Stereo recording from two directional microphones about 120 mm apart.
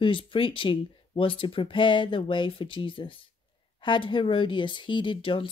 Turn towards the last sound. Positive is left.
turn(degrees=45)  # may be behind; listen again after turning